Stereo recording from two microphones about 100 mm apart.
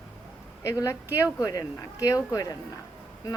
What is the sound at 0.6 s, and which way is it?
A woman's voice, 30° left (ahead or behind).